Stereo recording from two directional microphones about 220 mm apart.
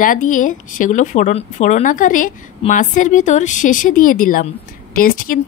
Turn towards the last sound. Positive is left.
turn(degrees=40)  # may be behind; listen again after turning